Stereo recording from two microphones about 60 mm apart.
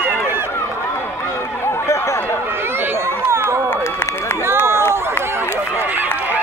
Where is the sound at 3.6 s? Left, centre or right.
Left.